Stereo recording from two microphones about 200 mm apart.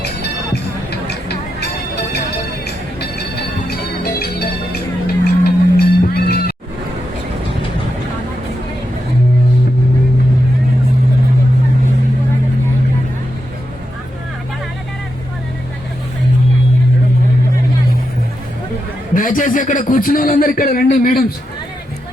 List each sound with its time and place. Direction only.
0.0 s music: 55° left (ahead or behind)
19.1 s a man's voice: 40° left (ahead or behind)